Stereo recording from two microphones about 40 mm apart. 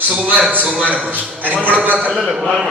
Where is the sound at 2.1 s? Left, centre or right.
Centre.